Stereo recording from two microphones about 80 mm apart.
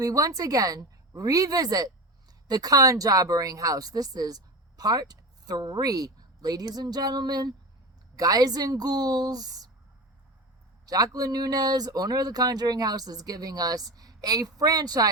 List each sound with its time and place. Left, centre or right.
0.0 s speech: right
10.8 s speech: right